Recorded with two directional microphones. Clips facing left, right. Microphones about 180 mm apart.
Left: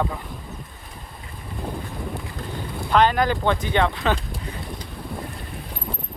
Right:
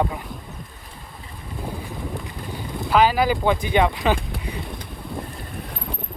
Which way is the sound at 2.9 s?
5° right (ahead or behind).